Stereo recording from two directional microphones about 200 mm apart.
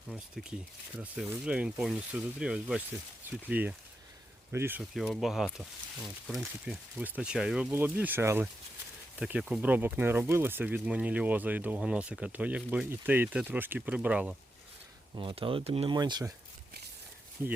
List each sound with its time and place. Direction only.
0.1 s speech: 5° right (ahead or behind)
15.1 s speech: 25° right (ahead or behind)
17.4 s speech: 10° right (ahead or behind)